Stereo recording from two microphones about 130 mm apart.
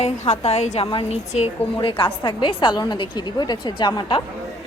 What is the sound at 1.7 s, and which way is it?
A woman's voice, 40° left (ahead or behind).